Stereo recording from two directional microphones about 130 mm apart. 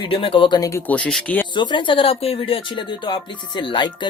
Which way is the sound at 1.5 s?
35° left (ahead or behind).